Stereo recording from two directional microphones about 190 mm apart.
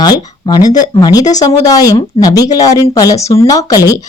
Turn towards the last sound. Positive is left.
turn(degrees=15)  # may be behind; listen again after turning